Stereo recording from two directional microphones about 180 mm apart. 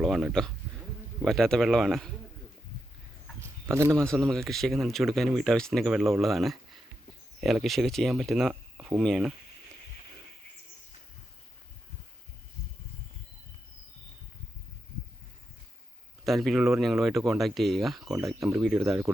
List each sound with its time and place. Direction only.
0.0 s speech: centre (ahead or behind)
3.4 s bird: 15° right (ahead or behind)
3.9 s speech: 5° left (ahead or behind)
16.2 s speech: centre (ahead or behind)
18.0 s speech: 15° right (ahead or behind)
18.6 s speech: centre (ahead or behind)